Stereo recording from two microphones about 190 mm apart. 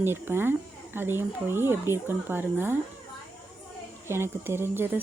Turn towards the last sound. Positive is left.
turn(degrees=-10)  # may be behind; listen again after turning